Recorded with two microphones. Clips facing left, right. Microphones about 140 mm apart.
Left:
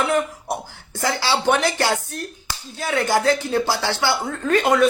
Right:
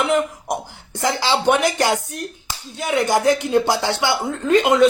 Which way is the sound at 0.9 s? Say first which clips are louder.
Right 2 dB; 20° right (ahead or behind).